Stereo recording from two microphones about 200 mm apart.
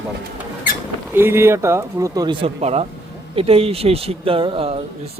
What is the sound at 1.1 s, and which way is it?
A man's voice, 10° right (ahead or behind).